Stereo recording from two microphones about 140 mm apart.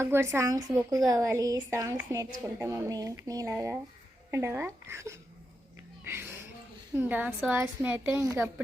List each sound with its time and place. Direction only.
0.0 s a woman's voice: 20° right (ahead or behind)
6.1 s music: 15° right (ahead or behind)
6.9 s a woman's voice: 15° right (ahead or behind)